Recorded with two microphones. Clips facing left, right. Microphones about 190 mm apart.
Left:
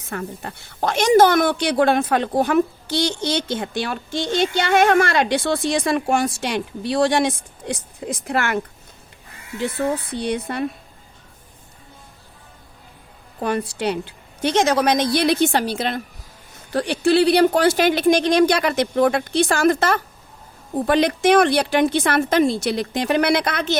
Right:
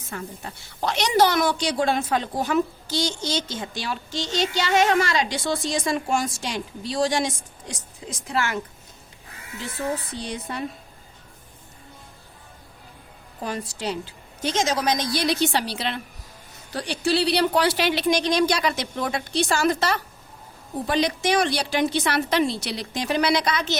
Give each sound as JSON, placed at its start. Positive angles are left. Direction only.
{"t": 0.1, "sound": "a woman's voice", "side_deg": 60}
{"t": 9.6, "sound": "a woman's voice", "side_deg": 60}
{"t": 13.4, "sound": "a woman's voice", "side_deg": 60}